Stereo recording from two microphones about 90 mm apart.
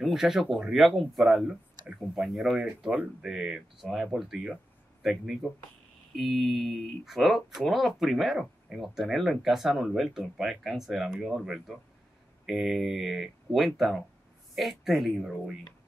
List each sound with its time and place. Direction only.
0.0 s speech: 5° right (ahead or behind)
2.6 s speech: 15° right (ahead or behind)